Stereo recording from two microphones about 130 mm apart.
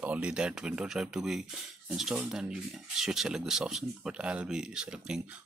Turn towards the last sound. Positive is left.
turn(degrees=-5)  # may be behind; listen again after turning